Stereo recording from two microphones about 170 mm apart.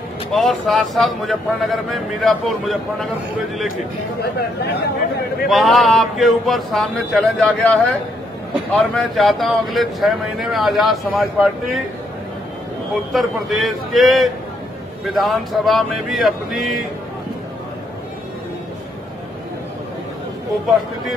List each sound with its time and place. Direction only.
0.3 s speech: centre (ahead or behind)
4.2 s speech: 70° left (ahead or behind)
5.5 s speech: centre (ahead or behind)
8.7 s speech: centre (ahead or behind)
13.1 s speech: centre (ahead or behind)